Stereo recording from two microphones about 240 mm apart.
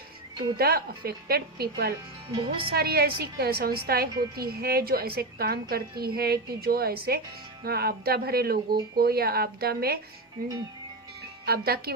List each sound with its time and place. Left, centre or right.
0.6 s a woman's voice: right